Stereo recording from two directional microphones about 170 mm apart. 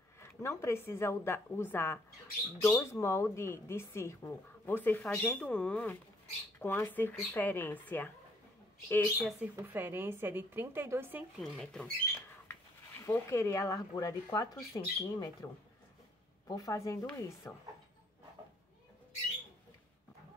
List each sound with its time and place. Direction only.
0.2 s a woman's voice: 15° left (ahead or behind)
9.6 s speech: 15° right (ahead or behind)
11.4 s speech: 5° left (ahead or behind)
13.0 s speech: 15° left (ahead or behind)